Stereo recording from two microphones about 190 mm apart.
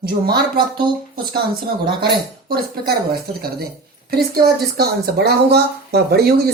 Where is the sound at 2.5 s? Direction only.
55° right (ahead or behind).